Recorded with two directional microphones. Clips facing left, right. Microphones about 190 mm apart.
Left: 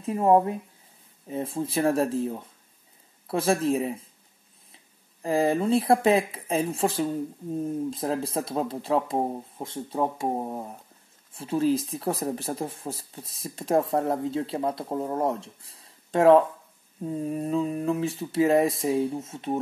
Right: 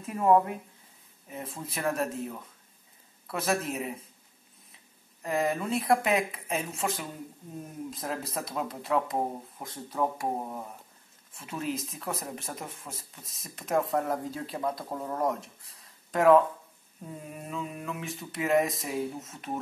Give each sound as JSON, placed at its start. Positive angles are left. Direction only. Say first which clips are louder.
{"t": 0.0, "sound": "speech", "louder": "left 3 dB", "side_deg": 30}
{"t": 5.2, "sound": "speech", "louder": "left 6 dB", "side_deg": 30}